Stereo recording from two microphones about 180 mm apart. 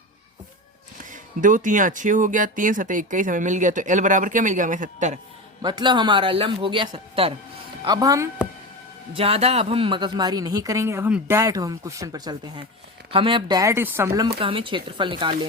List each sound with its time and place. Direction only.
1.1 s speech: 45° right (ahead or behind)
5.6 s a woman's voice: 25° right (ahead or behind)
7.9 s a woman's voice: 20° right (ahead or behind)
9.1 s a woman's voice: 35° right (ahead or behind); by 14.3 s 15° right (ahead or behind)
14.3 s a woman's voice: 30° right (ahead or behind)